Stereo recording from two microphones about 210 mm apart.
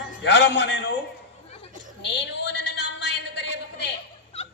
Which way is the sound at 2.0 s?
55° left (ahead or behind).